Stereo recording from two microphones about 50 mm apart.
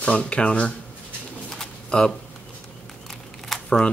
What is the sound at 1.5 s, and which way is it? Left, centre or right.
Pigeon, centre.